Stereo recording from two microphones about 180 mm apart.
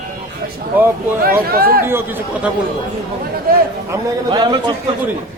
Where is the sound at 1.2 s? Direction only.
55° right (ahead or behind).